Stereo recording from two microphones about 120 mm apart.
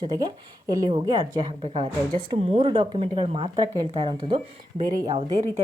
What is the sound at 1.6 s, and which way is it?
Speech, 50° right (ahead or behind).